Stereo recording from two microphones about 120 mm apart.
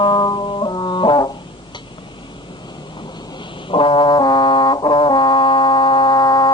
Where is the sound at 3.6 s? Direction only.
45° left (ahead or behind).